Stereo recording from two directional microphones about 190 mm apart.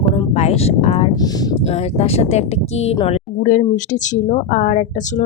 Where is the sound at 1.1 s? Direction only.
20° left (ahead or behind).